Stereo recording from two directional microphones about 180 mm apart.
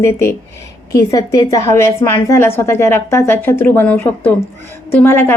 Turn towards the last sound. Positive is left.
turn(degrees=10)  # may be behind; listen again after turning